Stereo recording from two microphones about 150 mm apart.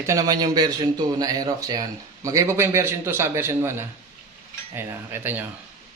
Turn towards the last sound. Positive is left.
turn(degrees=-15)  # may be behind; listen again after turning